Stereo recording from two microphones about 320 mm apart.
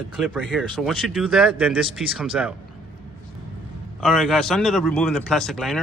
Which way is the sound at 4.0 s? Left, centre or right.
Centre.